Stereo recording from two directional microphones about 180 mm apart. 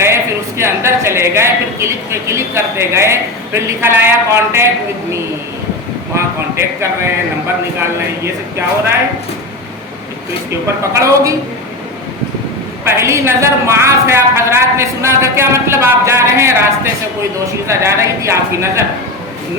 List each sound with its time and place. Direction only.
0.0 s a woman's voice: 15° right (ahead or behind)
6.1 s a woman's voice: 15° right (ahead or behind)
11.0 s a woman's voice: 20° right (ahead or behind)
12.8 s a woman's voice: 15° right (ahead or behind)